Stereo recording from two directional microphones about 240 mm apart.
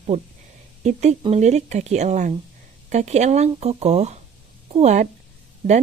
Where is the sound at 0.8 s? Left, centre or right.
Right.